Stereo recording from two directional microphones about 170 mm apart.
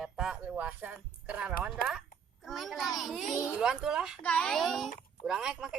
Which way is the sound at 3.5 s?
5° right (ahead or behind).